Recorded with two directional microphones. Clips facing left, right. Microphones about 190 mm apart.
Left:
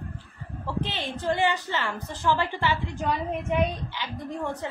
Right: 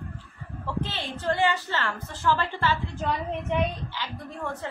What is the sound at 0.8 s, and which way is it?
A woman's voice, 20° left (ahead or behind).